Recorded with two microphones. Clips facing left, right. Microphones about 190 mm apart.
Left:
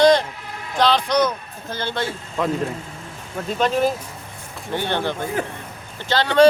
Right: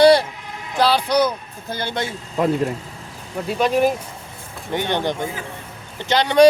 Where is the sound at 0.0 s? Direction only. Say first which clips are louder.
Right 2 dB; 10° right (ahead or behind).